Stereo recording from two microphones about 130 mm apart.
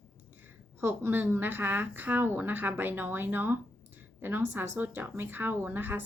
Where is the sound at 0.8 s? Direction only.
20° right (ahead or behind).